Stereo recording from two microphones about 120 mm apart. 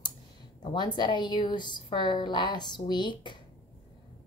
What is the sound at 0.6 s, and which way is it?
A woman's voice, 35° left (ahead or behind).